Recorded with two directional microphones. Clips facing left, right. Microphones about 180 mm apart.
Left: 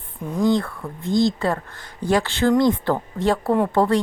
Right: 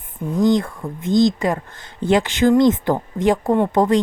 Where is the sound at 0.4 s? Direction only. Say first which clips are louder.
Right 2 dB; 20° right (ahead or behind).